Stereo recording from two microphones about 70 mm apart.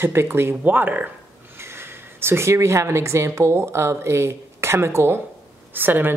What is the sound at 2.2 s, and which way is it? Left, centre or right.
Speech, right.